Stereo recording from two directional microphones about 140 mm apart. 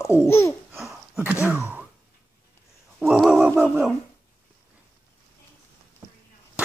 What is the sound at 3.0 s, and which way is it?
Wild animals, 5° right (ahead or behind).